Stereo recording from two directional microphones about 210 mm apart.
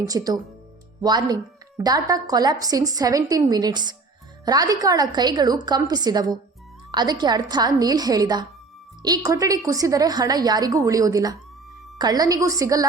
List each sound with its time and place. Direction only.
0.1 s a woman's voice: 15° right (ahead or behind)